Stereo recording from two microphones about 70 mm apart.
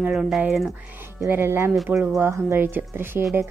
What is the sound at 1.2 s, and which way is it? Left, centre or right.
A woman's voice, right.